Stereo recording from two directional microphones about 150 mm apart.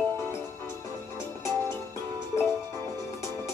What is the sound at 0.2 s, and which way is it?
Music, 15° left (ahead or behind).